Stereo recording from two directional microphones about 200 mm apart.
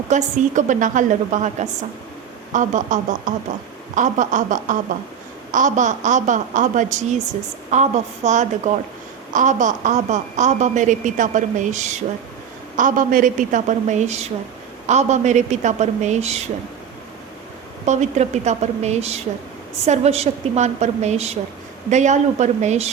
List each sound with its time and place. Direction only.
0.1 s a woman's voice: 40° right (ahead or behind)
17.8 s a woman's voice: 35° right (ahead or behind)